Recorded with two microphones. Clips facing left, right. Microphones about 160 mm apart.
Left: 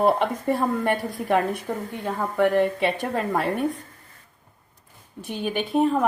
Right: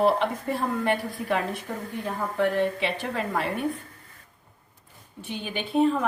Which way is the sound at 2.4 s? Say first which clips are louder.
Left 4 dB; 55° left (ahead or behind).